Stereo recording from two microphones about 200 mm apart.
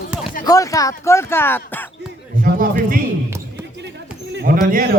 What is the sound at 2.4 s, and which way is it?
Speech, 45° right (ahead or behind).